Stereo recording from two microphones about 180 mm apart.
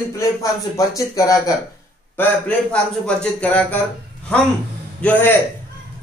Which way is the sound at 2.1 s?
5° left (ahead or behind).